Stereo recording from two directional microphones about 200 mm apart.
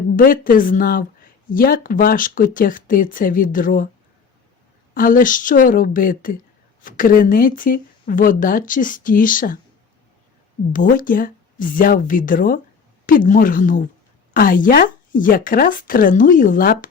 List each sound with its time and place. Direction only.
0.2 s speech: 45° left (ahead or behind)
4.9 s speech: 45° left (ahead or behind)
10.7 s speech: 40° left (ahead or behind)